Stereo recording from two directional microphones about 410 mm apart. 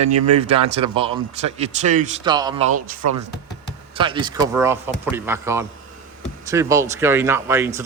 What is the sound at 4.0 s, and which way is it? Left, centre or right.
Speech, centre.